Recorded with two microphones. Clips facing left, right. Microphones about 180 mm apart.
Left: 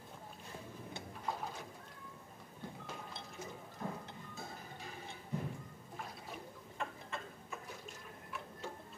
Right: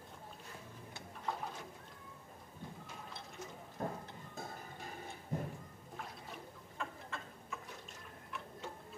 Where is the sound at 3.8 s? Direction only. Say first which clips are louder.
Right 3 dB; 40° right (ahead or behind).